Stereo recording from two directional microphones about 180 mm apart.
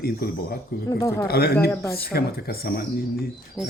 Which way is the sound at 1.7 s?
15° left (ahead or behind).